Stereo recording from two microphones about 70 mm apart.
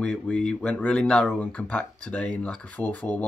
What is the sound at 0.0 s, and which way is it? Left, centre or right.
Speech, centre.